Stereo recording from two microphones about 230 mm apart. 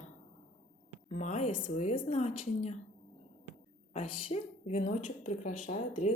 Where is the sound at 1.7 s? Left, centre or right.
Left.